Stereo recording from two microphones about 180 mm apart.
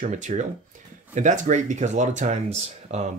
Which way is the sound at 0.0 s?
40° right (ahead or behind).